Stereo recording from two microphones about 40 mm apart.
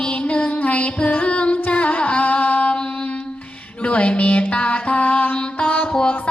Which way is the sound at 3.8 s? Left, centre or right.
Left.